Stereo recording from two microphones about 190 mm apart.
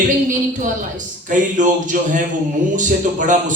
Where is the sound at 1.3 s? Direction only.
40° right (ahead or behind).